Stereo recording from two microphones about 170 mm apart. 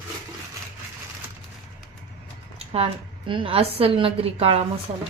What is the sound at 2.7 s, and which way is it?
A woman's voice, 30° right (ahead or behind).